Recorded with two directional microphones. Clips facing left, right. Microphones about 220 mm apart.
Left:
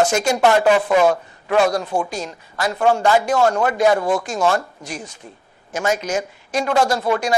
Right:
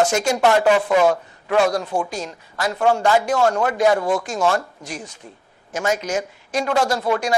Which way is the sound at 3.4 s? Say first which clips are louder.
Left 1 dB; 25° left (ahead or behind).